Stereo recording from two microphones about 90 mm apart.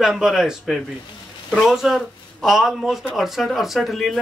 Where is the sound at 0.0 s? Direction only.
5° right (ahead or behind).